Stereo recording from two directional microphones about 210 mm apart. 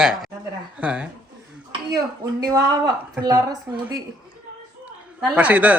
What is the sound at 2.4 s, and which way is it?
A woman's voice, 15° right (ahead or behind).